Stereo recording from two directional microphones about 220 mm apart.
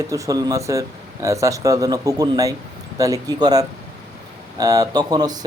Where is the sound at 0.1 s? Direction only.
15° right (ahead or behind).